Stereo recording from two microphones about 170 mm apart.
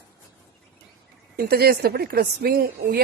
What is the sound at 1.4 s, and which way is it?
A woman's voice, 65° right (ahead or behind).